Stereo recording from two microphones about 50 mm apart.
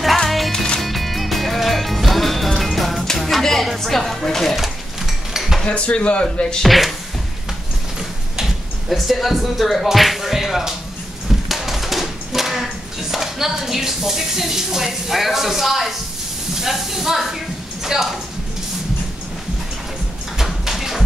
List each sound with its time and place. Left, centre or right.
0.0 s music: centre
3.2 s speech: centre
5.0 s dishes: centre
5.6 s speech: left
6.4 s speech: centre
8.8 s speech: centre
11.2 s a sound: centre
12.6 s speech: centre
20.3 s a sound: centre